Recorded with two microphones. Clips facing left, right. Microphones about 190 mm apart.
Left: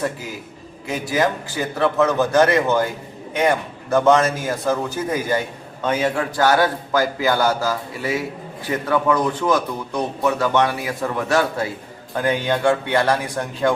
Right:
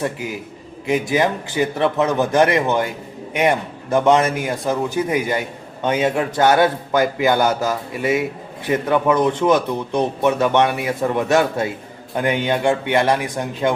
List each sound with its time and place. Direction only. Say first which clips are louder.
0.9 s speech: right 3 dB; 20° right (ahead or behind)
3.9 s a man's voice: even; 20° right (ahead or behind)